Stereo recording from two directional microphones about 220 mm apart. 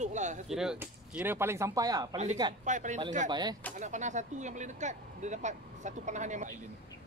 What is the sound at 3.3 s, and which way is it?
Speech, 20° right (ahead or behind).